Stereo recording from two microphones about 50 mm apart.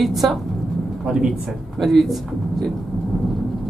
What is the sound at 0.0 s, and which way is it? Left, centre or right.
Speech, centre.